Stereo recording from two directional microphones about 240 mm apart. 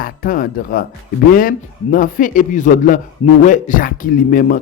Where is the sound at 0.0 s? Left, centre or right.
Left.